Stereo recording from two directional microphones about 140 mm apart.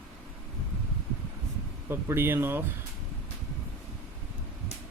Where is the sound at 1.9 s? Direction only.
15° right (ahead or behind).